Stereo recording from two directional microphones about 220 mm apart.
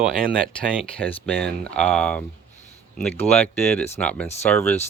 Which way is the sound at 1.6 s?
5° left (ahead or behind).